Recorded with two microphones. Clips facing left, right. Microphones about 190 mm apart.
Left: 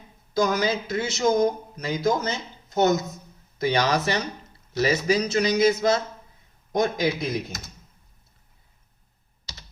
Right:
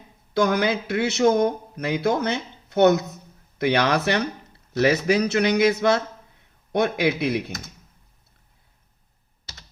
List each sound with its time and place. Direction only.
0.3 s speech: 60° right (ahead or behind)